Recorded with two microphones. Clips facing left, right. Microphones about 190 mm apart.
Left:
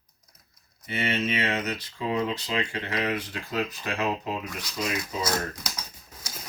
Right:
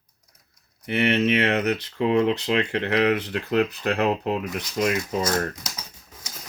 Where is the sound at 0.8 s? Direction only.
65° right (ahead or behind).